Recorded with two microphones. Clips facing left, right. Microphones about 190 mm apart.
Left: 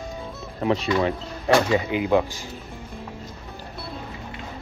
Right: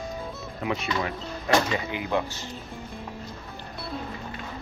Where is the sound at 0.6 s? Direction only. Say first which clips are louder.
Left 7 dB; 30° left (ahead or behind).